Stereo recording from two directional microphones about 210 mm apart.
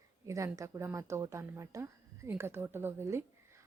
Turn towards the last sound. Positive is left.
turn(degrees=-10)  # may be behind; listen again after turning